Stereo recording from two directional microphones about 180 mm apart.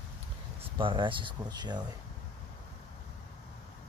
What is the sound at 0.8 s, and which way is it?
Speech, 30° right (ahead or behind).